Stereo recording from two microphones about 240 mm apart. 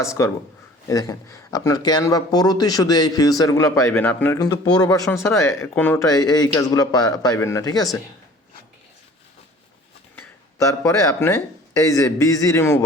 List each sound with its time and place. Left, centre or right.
0.0 s a man's voice: centre
10.2 s a man's voice: centre